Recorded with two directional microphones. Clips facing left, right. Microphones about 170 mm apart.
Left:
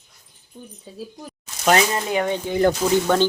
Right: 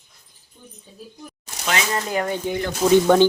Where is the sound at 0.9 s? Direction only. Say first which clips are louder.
Left 8 dB; 90° left.